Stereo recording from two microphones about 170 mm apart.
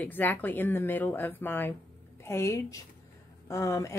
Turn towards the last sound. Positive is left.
turn(degrees=20)  # may be behind; listen again after turning